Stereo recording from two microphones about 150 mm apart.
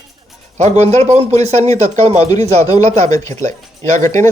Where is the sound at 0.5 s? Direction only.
50° right (ahead or behind).